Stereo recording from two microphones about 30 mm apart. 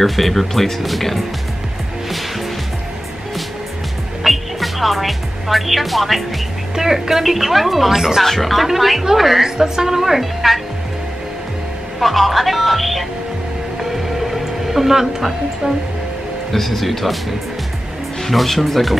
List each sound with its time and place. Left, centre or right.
0.0 s speech: centre
4.2 s music: centre
6.7 s speech: centre
8.2 s speech: centre
12.0 s speech: centre
14.2 s music: centre
15.0 s speech: centre
16.5 s speech: centre
18.2 s speech: centre